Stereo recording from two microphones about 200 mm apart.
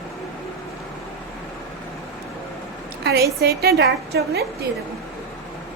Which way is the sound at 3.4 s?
50° right (ahead or behind).